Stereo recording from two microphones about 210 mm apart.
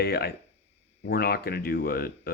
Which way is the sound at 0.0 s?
50° left (ahead or behind).